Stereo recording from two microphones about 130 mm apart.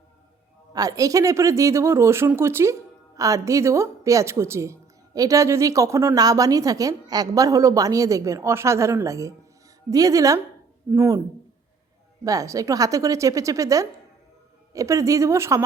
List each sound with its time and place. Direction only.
0.7 s a woman's voice: 30° right (ahead or behind)
12.2 s a woman's voice: 25° right (ahead or behind)